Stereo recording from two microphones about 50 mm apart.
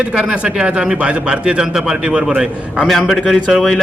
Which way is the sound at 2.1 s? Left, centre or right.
Right.